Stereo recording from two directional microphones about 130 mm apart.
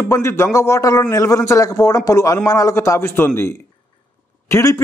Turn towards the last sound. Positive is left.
turn(degrees=25)  # may be behind; listen again after turning